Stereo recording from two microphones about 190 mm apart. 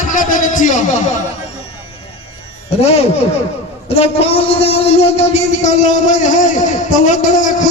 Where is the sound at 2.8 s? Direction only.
35° left (ahead or behind).